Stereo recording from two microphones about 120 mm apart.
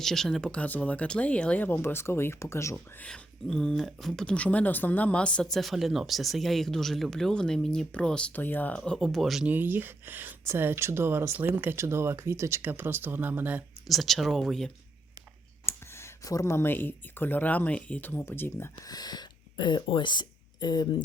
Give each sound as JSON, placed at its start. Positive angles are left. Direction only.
{"t": 0.0, "sound": "speech", "side_deg": 5}
{"t": 3.0, "sound": "speech", "side_deg": 5}
{"t": 9.5, "sound": "speech", "side_deg": -15}
{"t": 13.8, "sound": "speech", "side_deg": 0}
{"t": 15.6, "sound": "speech", "side_deg": 20}
{"t": 18.9, "sound": "speech", "side_deg": 35}